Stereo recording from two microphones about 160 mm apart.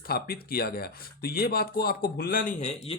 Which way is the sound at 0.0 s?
70° left (ahead or behind).